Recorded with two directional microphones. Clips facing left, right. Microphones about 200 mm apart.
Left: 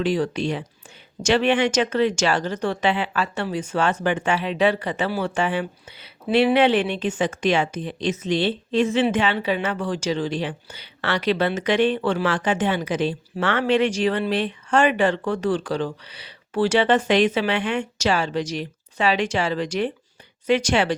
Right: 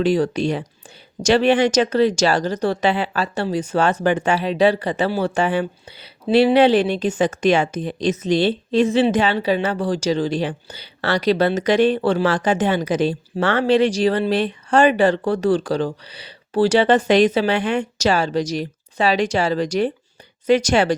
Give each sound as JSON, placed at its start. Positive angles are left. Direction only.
{"t": 0.0, "sound": "speech", "side_deg": -40}